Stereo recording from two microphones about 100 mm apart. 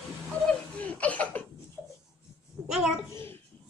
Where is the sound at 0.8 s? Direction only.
15° left (ahead or behind).